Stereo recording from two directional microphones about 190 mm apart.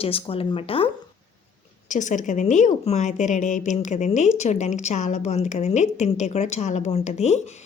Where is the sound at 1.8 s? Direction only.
40° left (ahead or behind).